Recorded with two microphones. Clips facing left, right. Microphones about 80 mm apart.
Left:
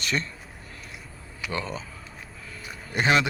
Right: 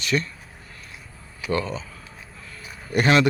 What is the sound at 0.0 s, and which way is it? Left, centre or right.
Speech, left.